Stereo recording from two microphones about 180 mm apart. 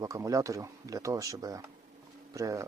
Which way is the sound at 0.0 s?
20° right (ahead or behind).